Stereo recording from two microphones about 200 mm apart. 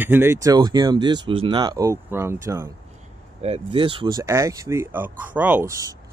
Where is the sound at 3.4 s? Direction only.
30° right (ahead or behind).